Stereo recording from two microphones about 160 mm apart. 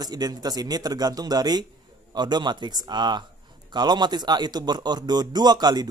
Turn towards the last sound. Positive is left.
turn(degrees=-25)  # may be behind; listen again after turning